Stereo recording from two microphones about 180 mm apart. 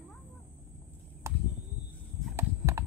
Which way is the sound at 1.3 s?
15° right (ahead or behind).